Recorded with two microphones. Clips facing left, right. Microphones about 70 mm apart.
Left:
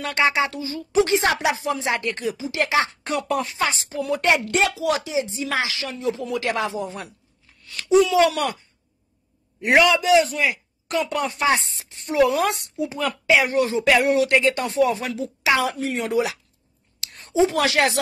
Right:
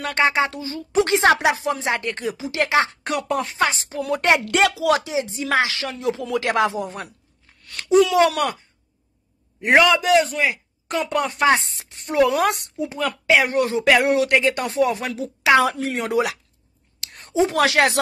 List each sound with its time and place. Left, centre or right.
0.0 s a woman's voice: right
1.1 s speech: right
1.4 s a woman's voice: right
2.3 s a woman's voice: right
4.5 s speech: right
5.7 s a woman's voice: right
9.8 s a woman's voice: right
14.0 s speech: right
14.4 s a woman's voice: right
15.6 s a woman's voice: right
16.1 s a woman's voice: right